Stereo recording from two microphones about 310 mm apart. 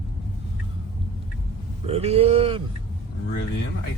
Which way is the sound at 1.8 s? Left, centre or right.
Centre.